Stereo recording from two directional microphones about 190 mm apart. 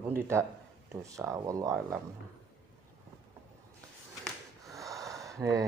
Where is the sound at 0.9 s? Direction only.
15° right (ahead or behind).